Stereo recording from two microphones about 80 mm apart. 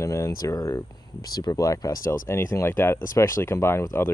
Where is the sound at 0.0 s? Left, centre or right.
Left.